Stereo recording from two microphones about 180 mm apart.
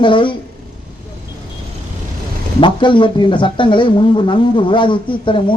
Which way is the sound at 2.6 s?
25° left (ahead or behind).